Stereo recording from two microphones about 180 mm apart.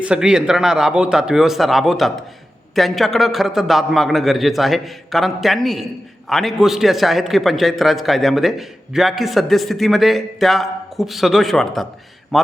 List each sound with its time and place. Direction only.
0.0 s a man's voice: 5° right (ahead or behind)